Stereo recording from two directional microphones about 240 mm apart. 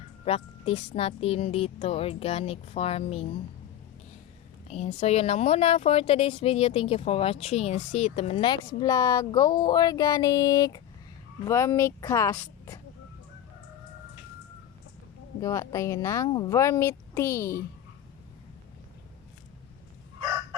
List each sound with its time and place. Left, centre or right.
0.3 s a woman's voice: left
4.7 s a woman's voice: left
15.4 s speech: centre